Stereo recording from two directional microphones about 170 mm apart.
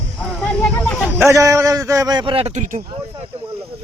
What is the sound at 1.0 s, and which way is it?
A man's voice, 15° right (ahead or behind).